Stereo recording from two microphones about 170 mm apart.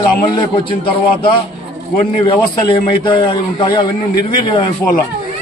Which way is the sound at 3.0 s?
30° left (ahead or behind).